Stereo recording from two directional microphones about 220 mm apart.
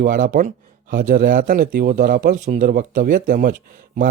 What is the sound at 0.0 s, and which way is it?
Speech, 35° right (ahead or behind).